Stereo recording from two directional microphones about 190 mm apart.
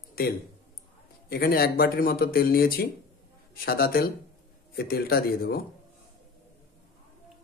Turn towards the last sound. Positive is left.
turn(degrees=55)  # may be behind; listen again after turning